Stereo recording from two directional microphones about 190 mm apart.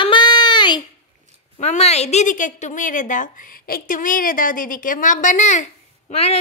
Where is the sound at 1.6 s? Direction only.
35° left (ahead or behind).